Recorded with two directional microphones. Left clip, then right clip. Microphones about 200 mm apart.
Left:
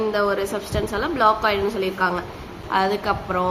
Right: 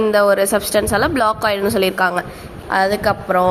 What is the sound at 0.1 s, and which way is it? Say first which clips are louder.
A woman's voice: right 8 dB; 35° right (ahead or behind).